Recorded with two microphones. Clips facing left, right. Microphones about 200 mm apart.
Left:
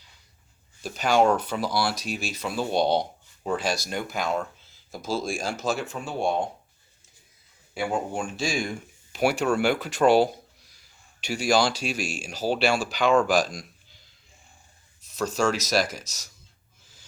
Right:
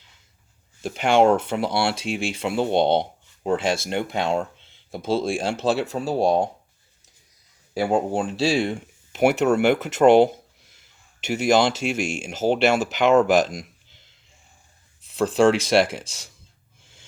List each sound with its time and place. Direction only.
0.8 s speech: 25° right (ahead or behind)
7.7 s speech: 40° right (ahead or behind); by 13.7 s 20° right (ahead or behind)
15.1 s speech: 30° right (ahead or behind)